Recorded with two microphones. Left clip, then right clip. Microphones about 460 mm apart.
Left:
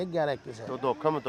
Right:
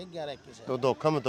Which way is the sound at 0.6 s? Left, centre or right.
Right.